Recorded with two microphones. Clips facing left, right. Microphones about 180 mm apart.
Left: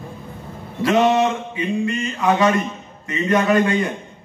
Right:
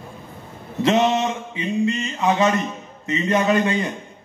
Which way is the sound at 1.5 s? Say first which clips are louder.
Even; 25° right (ahead or behind).